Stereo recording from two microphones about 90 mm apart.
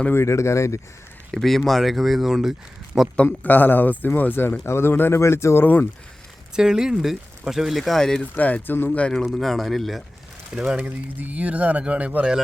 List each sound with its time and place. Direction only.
0.1 s speech: 30° left (ahead or behind)
1.3 s speech: centre (ahead or behind)
3.2 s speech: 20° left (ahead or behind)
5.6 s speech: 20° left (ahead or behind)
6.6 s speech: 5° right (ahead or behind)
8.2 s speech: 15° left (ahead or behind)
8.9 s speech: 10° left (ahead or behind); by 10.8 s 10° right (ahead or behind)
10.8 s speech: 20° right (ahead or behind)